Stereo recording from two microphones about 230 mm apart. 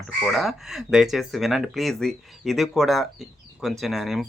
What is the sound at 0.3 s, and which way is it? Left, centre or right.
Speech, centre.